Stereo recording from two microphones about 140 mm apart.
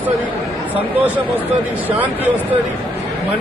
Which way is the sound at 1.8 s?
10° right (ahead or behind).